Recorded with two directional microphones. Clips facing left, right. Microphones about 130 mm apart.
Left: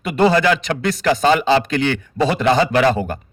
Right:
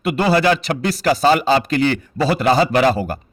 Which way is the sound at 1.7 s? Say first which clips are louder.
Right 2 dB; 35° right (ahead or behind).